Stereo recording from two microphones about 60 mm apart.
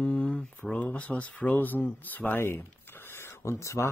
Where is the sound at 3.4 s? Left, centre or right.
Left.